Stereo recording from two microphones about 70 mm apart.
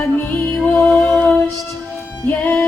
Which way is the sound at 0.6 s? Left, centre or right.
Left.